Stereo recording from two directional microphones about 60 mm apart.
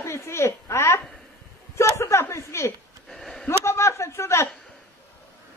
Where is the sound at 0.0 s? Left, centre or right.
Left.